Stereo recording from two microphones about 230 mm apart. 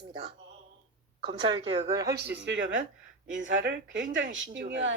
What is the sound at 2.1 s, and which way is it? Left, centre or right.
Speech, right.